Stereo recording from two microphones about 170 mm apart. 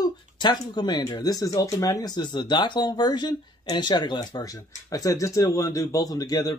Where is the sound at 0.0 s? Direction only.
25° left (ahead or behind).